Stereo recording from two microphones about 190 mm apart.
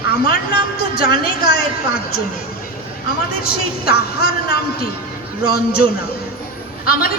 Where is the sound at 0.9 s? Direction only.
55° left (ahead or behind).